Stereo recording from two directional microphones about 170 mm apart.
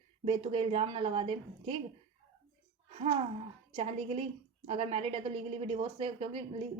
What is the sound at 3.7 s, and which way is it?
A woman's voice, 35° right (ahead or behind).